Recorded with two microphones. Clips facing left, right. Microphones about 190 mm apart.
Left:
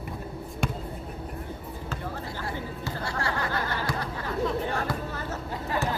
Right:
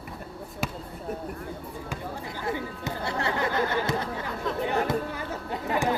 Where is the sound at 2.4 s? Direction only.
20° right (ahead or behind).